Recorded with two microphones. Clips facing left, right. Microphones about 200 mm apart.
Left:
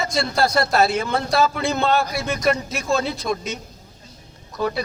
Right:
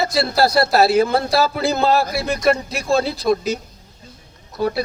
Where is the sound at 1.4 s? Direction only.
35° right (ahead or behind).